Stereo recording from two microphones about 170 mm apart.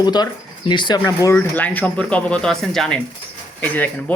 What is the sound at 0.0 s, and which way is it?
Speech, 25° left (ahead or behind).